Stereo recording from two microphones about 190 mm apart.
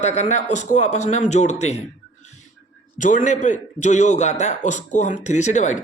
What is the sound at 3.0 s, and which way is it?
A man's voice, 40° left (ahead or behind).